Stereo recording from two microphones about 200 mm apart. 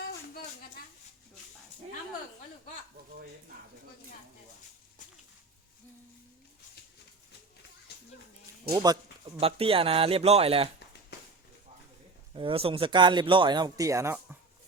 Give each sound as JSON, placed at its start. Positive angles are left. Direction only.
{"t": 8.7, "sound": "speech", "side_deg": -20}
{"t": 12.3, "sound": "speech", "side_deg": -25}